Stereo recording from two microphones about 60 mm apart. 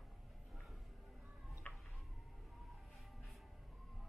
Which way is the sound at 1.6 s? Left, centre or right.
Left.